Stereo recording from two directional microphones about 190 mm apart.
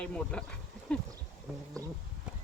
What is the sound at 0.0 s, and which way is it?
Speech, 5° left (ahead or behind).